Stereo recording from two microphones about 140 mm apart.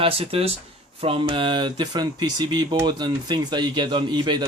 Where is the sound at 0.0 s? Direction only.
45° right (ahead or behind).